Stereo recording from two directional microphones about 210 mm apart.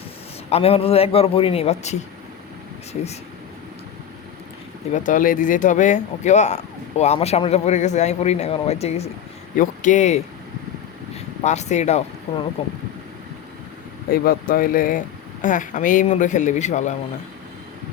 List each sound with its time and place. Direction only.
0.5 s a man's voice: 30° left (ahead or behind)
4.9 s a man's voice: 35° left (ahead or behind)
14.1 s speech: 45° left (ahead or behind)